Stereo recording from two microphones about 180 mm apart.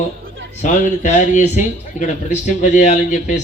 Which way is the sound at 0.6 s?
40° left (ahead or behind).